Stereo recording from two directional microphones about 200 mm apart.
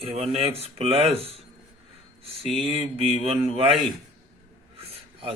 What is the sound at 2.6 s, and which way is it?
Speech, 30° right (ahead or behind).